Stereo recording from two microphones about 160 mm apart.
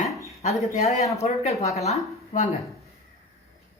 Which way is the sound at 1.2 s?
40° left (ahead or behind).